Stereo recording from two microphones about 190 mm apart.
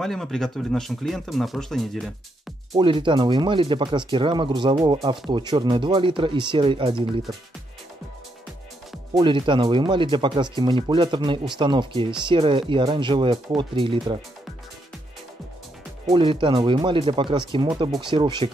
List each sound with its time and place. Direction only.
0.0 s speech: centre (ahead or behind)
2.7 s speech: 25° right (ahead or behind)
9.1 s speech: 25° right (ahead or behind)
16.1 s speech: 25° right (ahead or behind)